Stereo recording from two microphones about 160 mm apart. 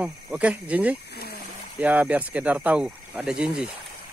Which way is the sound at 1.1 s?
75° left (ahead or behind).